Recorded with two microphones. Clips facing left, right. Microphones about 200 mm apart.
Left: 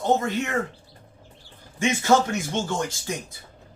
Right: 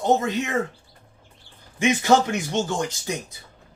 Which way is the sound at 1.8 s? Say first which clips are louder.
Right 2 dB; 15° right (ahead or behind).